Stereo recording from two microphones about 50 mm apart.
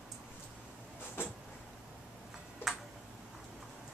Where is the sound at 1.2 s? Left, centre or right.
Left.